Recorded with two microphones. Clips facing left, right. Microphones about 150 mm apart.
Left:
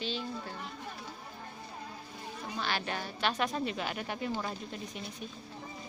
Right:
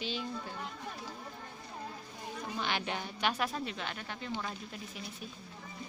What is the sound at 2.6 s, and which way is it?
A woman's voice, 20° right (ahead or behind).